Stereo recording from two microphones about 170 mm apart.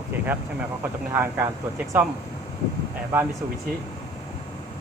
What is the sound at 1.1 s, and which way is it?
Speech, 15° right (ahead or behind).